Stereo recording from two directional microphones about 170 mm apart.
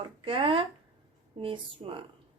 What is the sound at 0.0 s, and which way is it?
A woman's voice, 30° right (ahead or behind).